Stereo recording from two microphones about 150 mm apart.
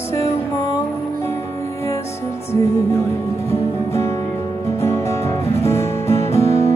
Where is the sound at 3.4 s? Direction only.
20° left (ahead or behind).